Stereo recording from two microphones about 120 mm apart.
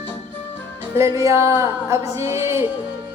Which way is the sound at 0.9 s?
25° right (ahead or behind).